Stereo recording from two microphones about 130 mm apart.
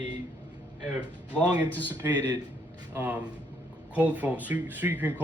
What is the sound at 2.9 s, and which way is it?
Speech, 10° right (ahead or behind).